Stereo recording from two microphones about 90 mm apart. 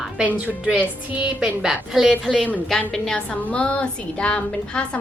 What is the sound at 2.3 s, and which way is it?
A woman's voice, 15° left (ahead or behind).